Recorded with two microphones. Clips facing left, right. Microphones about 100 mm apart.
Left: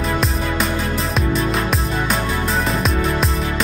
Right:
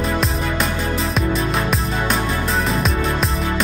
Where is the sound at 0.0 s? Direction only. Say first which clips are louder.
Even; centre (ahead or behind).